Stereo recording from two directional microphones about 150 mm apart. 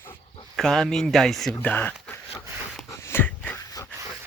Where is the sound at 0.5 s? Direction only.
Centre (ahead or behind).